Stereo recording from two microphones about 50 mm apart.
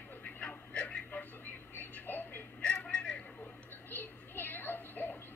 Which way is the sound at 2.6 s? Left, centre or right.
Left.